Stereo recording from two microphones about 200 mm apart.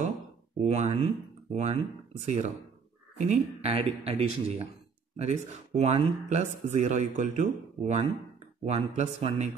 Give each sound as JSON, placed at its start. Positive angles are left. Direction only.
{"t": 0.7, "sound": "speech", "side_deg": -35}